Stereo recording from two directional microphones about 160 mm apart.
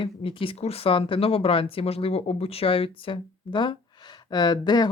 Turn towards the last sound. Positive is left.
turn(degrees=25)  # may be behind; listen again after turning